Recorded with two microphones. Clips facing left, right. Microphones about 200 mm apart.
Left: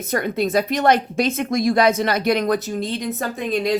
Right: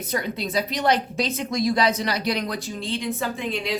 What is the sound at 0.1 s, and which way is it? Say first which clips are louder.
Speech: left 7 dB; 50° left (ahead or behind).